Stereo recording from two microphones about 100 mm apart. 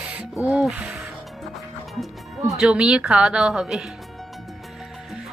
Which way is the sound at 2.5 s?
10° right (ahead or behind).